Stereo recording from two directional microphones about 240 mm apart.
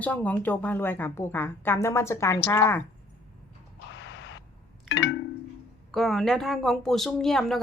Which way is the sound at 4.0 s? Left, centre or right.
Left.